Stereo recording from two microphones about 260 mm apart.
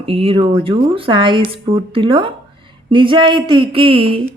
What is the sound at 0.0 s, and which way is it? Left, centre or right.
Speech, right.